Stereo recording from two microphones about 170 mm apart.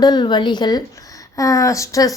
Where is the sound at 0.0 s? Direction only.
25° left (ahead or behind).